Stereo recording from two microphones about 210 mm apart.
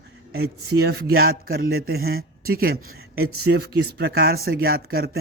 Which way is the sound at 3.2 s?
90° right.